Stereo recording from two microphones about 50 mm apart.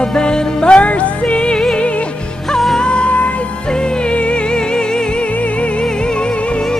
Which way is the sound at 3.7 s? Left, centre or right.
Centre.